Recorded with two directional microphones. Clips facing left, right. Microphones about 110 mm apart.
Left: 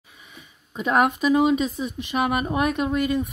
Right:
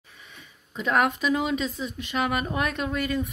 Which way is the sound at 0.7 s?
20° left (ahead or behind).